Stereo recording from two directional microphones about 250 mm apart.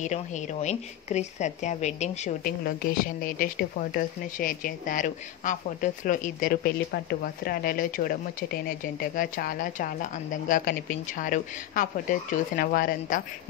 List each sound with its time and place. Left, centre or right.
0.0 s a woman's voice: left